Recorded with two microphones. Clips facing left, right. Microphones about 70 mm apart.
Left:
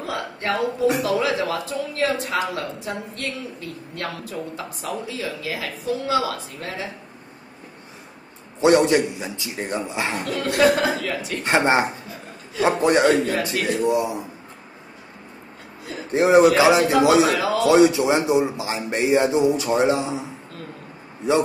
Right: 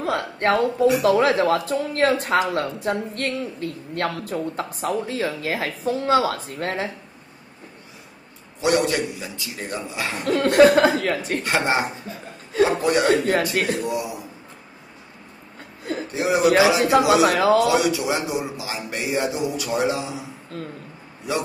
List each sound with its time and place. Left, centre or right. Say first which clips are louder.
0.0 s a woman's voice: right 5 dB; right
8.5 s a man's voice: left 4 dB; left
10.2 s a woman's voice: right 5 dB; right
11.4 s a man's voice: left 5 dB; left
16.1 s a man's voice: left 5 dB; left
17.3 s a man's voice: right 4 dB; right
17.6 s a man's voice: left 4 dB; left